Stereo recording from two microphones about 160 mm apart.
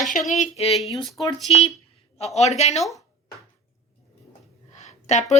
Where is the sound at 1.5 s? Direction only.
35° left (ahead or behind).